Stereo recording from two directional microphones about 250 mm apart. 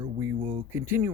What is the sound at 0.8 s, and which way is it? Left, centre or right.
Speech, centre.